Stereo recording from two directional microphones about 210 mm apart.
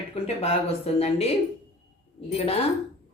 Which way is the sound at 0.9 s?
30° left (ahead or behind).